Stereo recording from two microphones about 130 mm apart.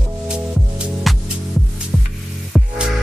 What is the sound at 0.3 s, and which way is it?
Music, 5° right (ahead or behind).